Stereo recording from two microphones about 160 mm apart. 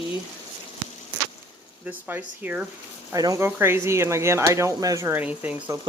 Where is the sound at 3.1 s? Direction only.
20° right (ahead or behind).